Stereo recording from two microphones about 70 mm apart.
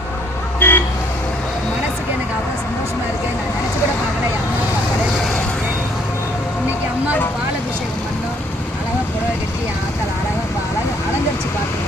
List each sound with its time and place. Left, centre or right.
0.6 s vehicle: left